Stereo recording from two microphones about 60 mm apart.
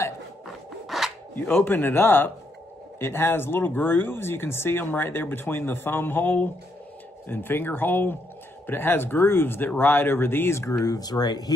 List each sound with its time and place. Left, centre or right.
0.8 s filing: centre
1.3 s speech: left
10.9 s speech: left